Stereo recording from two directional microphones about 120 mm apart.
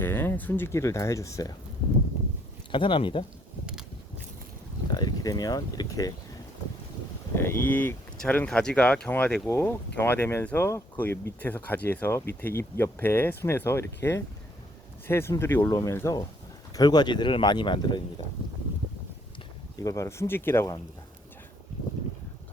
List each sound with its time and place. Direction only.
0.0 s speech: 20° left (ahead or behind)
2.7 s speech: 45° left (ahead or behind)
4.9 s speech: 35° left (ahead or behind)
7.3 s speech: 20° left (ahead or behind); by 18.0 s 40° left (ahead or behind)
19.7 s speech: 30° left (ahead or behind)